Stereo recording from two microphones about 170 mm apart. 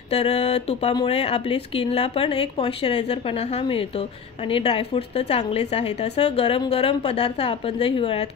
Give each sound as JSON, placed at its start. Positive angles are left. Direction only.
{"t": 0.1, "sound": "speech", "side_deg": 40}